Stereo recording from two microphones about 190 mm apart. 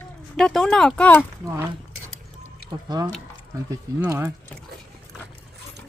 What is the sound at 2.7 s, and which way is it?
Speech, 20° right (ahead or behind).